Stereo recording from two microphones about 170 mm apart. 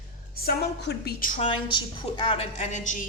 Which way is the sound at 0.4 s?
75° left (ahead or behind).